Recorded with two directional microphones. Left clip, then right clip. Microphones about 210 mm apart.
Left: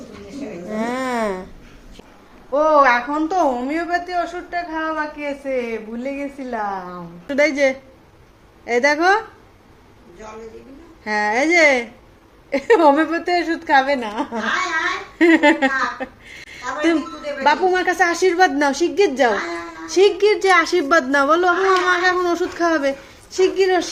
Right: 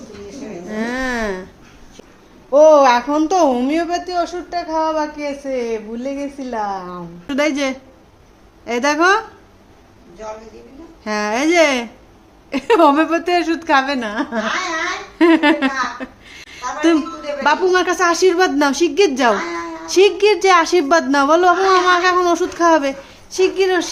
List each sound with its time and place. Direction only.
0.7 s a sound: centre (ahead or behind)
2.5 s speech: 30° right (ahead or behind)
5.2 s a woman's voice: 15° right (ahead or behind)
11.0 s a woman's voice: 15° right (ahead or behind)